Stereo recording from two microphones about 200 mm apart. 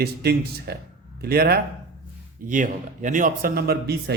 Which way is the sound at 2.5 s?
40° right (ahead or behind).